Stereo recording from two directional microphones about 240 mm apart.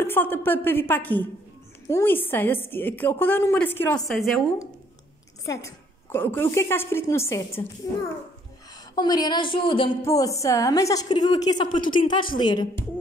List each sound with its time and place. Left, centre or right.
0.0 s a woman's voice: centre
5.4 s a woman's voice: centre
8.9 s a woman's voice: centre